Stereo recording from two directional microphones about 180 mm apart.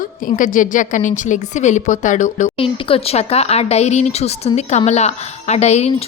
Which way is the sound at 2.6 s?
30° left (ahead or behind).